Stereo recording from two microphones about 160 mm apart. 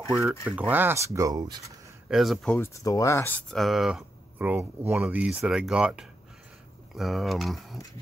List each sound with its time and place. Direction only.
0.1 s speech: 15° right (ahead or behind)
2.0 s speech: centre (ahead or behind)
2.6 s speech: 20° left (ahead or behind); by 7.8 s centre (ahead or behind)